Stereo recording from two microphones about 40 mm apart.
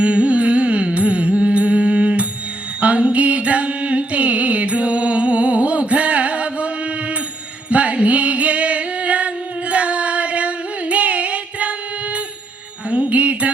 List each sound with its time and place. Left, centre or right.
0.0 s music: right
7.7 s music: right
12.9 s jingle bell: right